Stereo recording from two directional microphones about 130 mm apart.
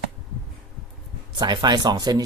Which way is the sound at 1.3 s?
35° right (ahead or behind).